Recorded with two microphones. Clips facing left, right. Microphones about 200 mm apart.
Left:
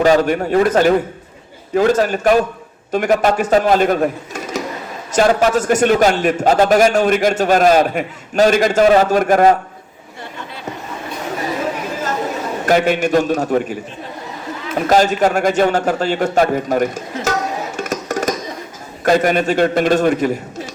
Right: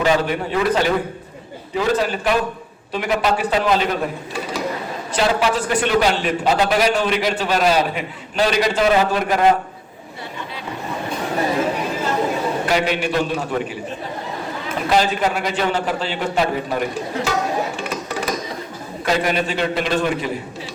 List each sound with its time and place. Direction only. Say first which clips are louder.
0.0 s a man's voice: left 5 dB; 45° left (ahead or behind)
12.6 s a man's voice: left 9 dB; 45° left (ahead or behind)
14.8 s a man's voice: left 5 dB; 45° left (ahead or behind)
17.7 s music: left 4 dB; 45° left (ahead or behind)
19.0 s a man's voice: left 6 dB; 45° left (ahead or behind)